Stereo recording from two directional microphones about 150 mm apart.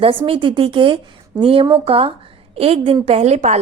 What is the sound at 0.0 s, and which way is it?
A woman's voice, 35° right (ahead or behind).